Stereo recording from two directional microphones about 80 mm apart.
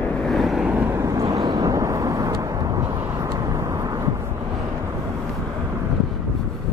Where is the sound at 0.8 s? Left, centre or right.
Right.